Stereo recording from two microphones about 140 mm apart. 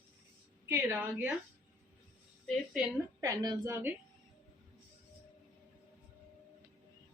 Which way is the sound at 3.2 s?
25° right (ahead or behind).